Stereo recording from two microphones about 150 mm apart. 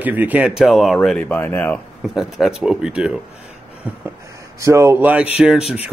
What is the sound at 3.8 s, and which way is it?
A man's voice, 15° right (ahead or behind).